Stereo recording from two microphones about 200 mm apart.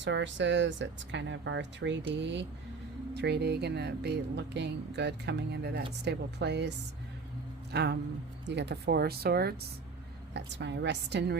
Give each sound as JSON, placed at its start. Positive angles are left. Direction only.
{"t": 0.0, "sound": "speech", "side_deg": -65}